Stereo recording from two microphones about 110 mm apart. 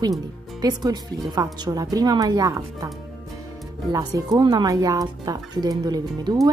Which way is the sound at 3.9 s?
35° right (ahead or behind).